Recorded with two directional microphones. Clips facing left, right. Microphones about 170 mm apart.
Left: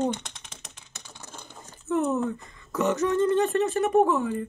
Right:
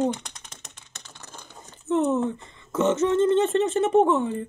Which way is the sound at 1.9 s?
25° right (ahead or behind).